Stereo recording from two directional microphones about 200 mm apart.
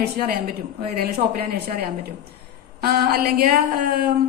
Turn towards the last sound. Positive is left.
turn(degrees=-50)  # may be behind; listen again after turning